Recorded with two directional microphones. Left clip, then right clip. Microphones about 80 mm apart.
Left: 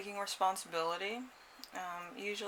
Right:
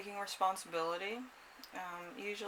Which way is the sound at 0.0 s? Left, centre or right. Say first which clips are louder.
Left 1 dB; left.